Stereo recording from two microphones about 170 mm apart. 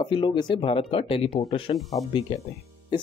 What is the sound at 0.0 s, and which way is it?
Speech, 30° left (ahead or behind).